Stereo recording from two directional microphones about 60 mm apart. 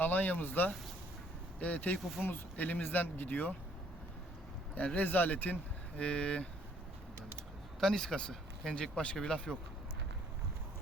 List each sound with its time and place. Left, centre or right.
0.0 s speech: left
4.9 s speech: left
6.0 s speech: centre
7.8 s speech: centre